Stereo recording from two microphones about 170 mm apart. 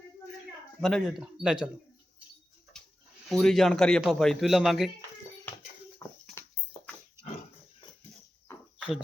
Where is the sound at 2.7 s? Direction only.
5° left (ahead or behind).